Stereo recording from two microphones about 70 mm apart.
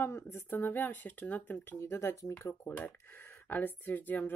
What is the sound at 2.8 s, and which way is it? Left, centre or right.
Speech, left.